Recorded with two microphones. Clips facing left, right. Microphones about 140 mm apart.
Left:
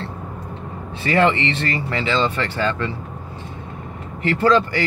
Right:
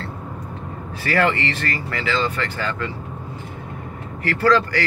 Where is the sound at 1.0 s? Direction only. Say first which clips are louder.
Left 3 dB; 25° left (ahead or behind).